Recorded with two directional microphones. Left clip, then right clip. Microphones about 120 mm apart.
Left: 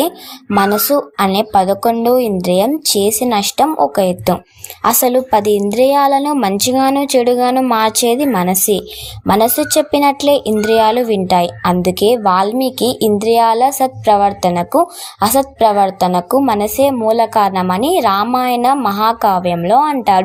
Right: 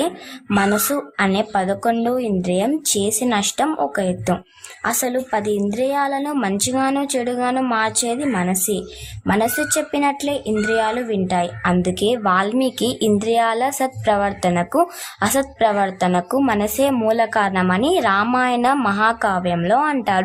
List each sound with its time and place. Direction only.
0.7 s a woman's voice: 15° left (ahead or behind)
1.1 s a woman's voice: 30° left (ahead or behind)